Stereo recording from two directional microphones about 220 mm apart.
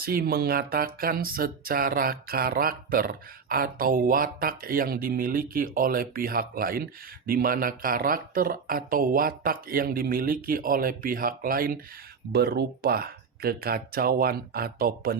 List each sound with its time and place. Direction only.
0.0 s speech: 40° right (ahead or behind)